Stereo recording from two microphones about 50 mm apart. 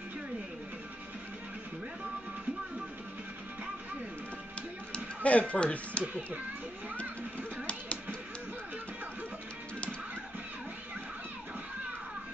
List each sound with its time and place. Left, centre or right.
4.9 s speech: left